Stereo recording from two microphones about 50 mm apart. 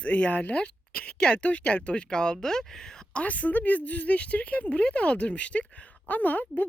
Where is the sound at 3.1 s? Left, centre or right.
Left.